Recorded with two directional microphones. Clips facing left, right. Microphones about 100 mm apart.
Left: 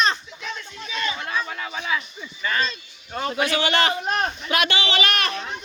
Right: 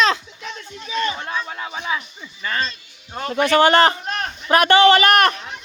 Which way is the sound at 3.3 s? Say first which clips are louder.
Right 9 dB; 55° right (ahead or behind).